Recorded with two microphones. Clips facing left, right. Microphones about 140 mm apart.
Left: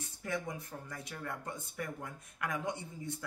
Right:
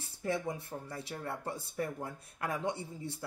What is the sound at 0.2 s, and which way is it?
Speech, 30° right (ahead or behind).